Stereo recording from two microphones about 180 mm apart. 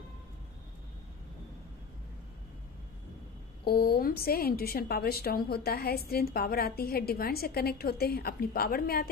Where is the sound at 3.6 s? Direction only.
60° left (ahead or behind).